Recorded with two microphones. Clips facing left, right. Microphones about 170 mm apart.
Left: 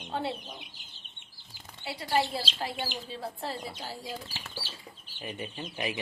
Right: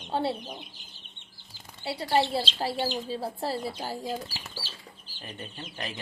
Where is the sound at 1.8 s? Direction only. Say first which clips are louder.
Right 3 dB; 30° right (ahead or behind).